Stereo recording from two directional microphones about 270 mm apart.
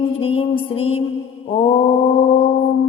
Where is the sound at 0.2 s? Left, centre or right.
Left.